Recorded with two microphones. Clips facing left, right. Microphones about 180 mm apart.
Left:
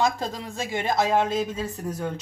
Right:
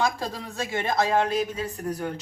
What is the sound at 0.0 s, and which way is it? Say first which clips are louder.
Speech: left 2 dB; 20° left (ahead or behind).